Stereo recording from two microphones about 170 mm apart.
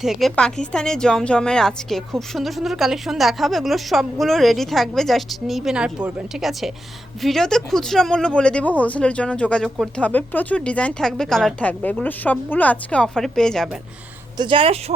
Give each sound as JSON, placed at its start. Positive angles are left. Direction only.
{"t": 0.0, "sound": "a woman's voice", "side_deg": 0}
{"t": 14.3, "sound": "speech", "side_deg": -30}